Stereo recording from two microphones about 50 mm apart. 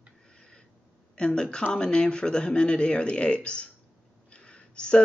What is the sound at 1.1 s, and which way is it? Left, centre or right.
Speech, centre.